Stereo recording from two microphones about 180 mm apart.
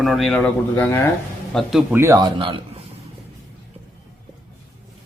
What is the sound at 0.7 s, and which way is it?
Speech, 10° left (ahead or behind).